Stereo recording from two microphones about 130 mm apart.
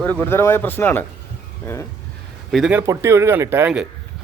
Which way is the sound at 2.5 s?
Centre (ahead or behind).